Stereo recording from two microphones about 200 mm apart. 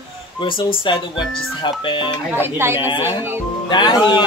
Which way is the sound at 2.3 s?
10° right (ahead or behind).